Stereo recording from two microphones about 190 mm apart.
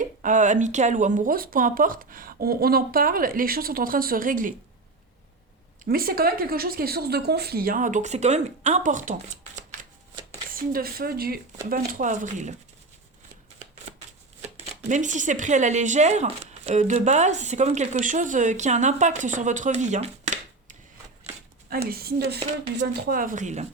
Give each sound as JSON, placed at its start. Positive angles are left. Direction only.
{"t": 0.0, "sound": "speech", "side_deg": -45}
{"t": 5.8, "sound": "speech", "side_deg": -50}
{"t": 10.5, "sound": "speech", "side_deg": -50}
{"t": 14.8, "sound": "speech", "side_deg": -40}
{"t": 21.8, "sound": "speech", "side_deg": -55}
{"t": 22.4, "sound": "speech", "side_deg": -35}
{"t": 23.0, "sound": "speech", "side_deg": -50}